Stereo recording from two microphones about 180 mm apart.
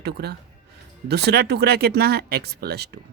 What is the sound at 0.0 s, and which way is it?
Speech, 65° right (ahead or behind).